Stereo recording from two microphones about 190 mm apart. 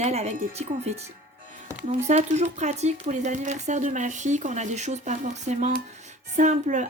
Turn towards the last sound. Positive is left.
turn(degrees=-40)  # may be behind; listen again after turning